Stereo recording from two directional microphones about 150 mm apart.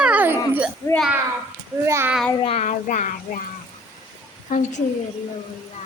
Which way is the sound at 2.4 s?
40° left (ahead or behind).